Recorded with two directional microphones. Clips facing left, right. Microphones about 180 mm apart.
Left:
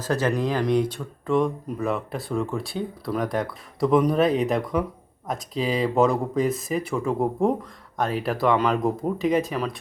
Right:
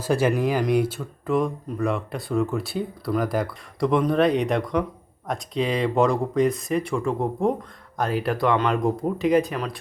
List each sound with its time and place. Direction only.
0.0 s speech: 10° right (ahead or behind)